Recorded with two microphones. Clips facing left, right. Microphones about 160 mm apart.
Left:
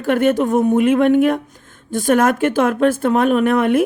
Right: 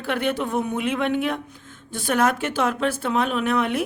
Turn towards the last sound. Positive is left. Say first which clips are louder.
# left 8 dB
turn(degrees=50)  # may be behind; listen again after turning